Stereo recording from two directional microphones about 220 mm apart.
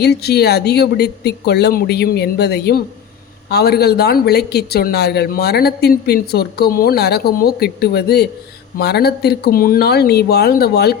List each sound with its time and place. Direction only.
0.0 s speech: 50° left (ahead or behind)